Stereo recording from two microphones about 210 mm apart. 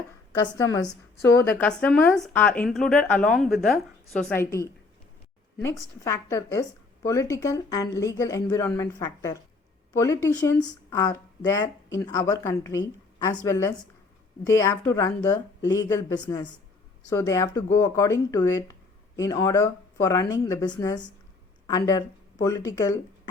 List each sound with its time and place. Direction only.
0.3 s speech: 15° left (ahead or behind)
6.1 s speech: 15° left (ahead or behind)